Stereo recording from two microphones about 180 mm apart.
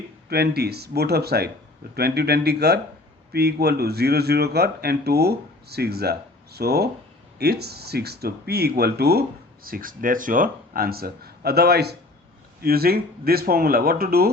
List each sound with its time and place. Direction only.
0.3 s speech: 60° right (ahead or behind)